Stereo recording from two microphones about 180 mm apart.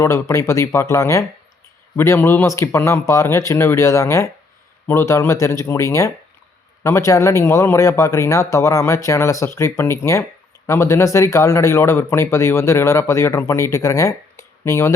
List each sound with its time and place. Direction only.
0.0 s speech: 15° left (ahead or behind)